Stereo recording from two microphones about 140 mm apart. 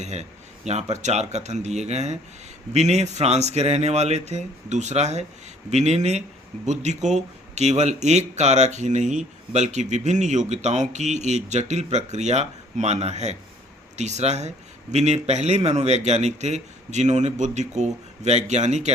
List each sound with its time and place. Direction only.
0.0 s speech: 55° right (ahead or behind)